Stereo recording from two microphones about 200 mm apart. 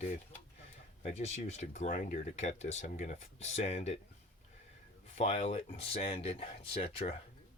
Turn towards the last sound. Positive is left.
turn(degrees=30)  # may be behind; listen again after turning